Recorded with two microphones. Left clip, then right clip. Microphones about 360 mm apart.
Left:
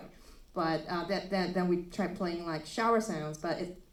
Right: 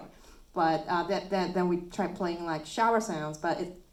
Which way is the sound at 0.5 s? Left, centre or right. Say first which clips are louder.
Right 6 dB; right.